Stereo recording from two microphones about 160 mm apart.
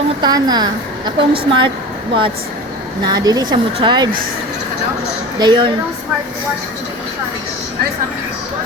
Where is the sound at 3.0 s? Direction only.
25° right (ahead or behind).